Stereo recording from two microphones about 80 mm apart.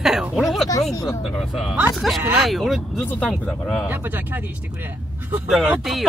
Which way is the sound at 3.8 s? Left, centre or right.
Right.